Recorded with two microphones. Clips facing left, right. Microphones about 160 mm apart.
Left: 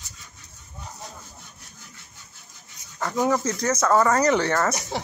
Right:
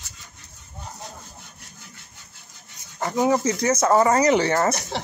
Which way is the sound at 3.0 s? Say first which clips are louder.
Right 2 dB; 10° right (ahead or behind).